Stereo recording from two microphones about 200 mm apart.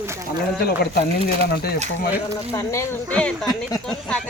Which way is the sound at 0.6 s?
50° left (ahead or behind).